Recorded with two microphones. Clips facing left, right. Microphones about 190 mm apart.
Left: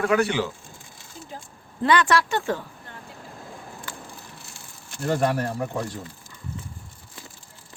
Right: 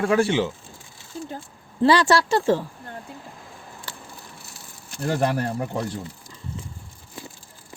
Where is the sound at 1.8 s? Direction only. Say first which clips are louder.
Right 3 dB; 30° right (ahead or behind).